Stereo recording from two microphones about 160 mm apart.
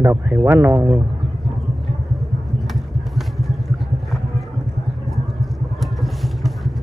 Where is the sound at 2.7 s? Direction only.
Centre (ahead or behind).